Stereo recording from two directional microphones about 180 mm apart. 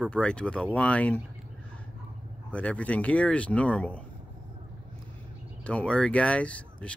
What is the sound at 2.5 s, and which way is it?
Speech, 5° left (ahead or behind).